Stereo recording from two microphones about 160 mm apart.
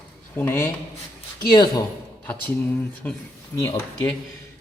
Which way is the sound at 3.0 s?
10° left (ahead or behind).